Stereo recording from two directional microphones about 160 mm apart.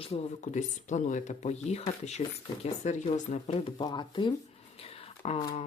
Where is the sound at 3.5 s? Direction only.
30° left (ahead or behind).